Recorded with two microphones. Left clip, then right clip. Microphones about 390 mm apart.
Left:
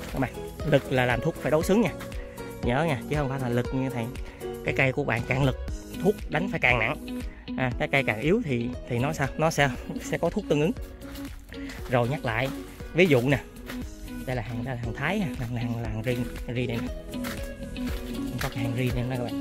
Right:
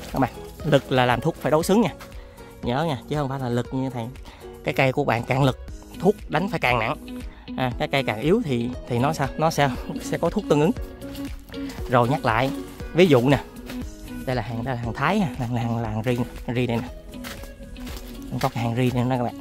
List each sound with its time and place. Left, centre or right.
0.1 s speech: centre
7.1 s music: centre
7.5 s speech: centre
11.9 s speech: centre
18.6 s speech: centre